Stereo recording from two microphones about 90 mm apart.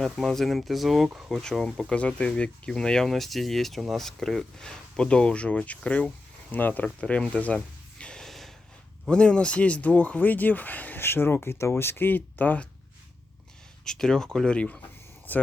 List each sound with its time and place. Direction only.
0.0 s speech: centre (ahead or behind)
1.3 s speech: 5° left (ahead or behind)
6.8 s a sound: 10° left (ahead or behind)
9.0 s speech: 10° left (ahead or behind)
13.8 s speech: 5° left (ahead or behind)